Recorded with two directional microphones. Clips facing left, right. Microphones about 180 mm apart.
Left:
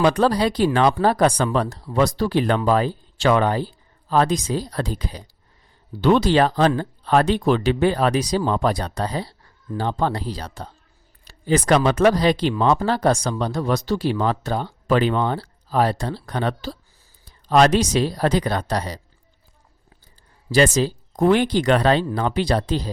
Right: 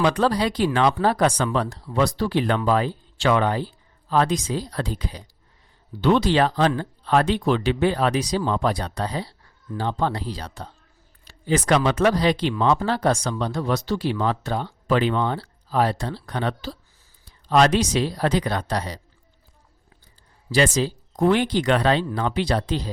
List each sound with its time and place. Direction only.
0.0 s speech: 35° left (ahead or behind)
20.5 s speech: 45° left (ahead or behind)